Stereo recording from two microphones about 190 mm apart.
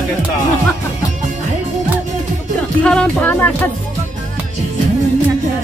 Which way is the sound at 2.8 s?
5° left (ahead or behind).